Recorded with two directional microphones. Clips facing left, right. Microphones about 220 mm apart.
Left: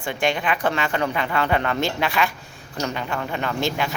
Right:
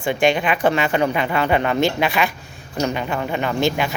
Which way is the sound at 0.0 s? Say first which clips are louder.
Right 5 dB; 20° right (ahead or behind).